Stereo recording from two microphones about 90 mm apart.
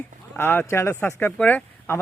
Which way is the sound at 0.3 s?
25° left (ahead or behind).